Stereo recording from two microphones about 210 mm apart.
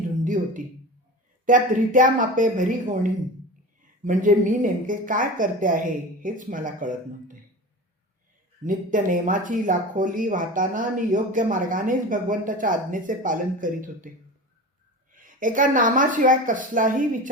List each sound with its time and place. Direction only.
0.3 s speech: 40° right (ahead or behind)
8.6 s speech: 40° right (ahead or behind)
15.1 s speech: 40° right (ahead or behind)